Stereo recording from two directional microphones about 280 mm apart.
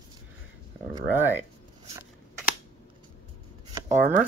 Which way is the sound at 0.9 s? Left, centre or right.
Centre.